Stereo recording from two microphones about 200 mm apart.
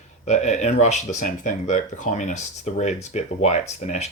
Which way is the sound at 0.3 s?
35° left (ahead or behind).